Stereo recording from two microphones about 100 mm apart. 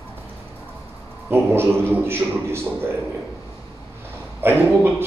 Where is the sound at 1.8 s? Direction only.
25° right (ahead or behind).